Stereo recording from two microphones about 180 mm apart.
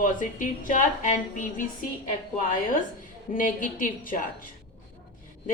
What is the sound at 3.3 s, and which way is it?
Speech, 50° left (ahead or behind).